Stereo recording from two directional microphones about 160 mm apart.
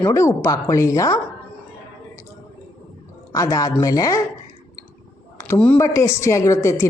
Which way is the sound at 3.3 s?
20° left (ahead or behind).